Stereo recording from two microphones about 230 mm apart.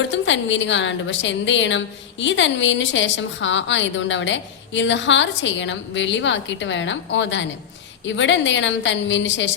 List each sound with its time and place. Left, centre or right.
0.1 s a woman's voice: left